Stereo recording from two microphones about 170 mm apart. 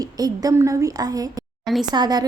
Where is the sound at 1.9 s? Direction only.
25° right (ahead or behind).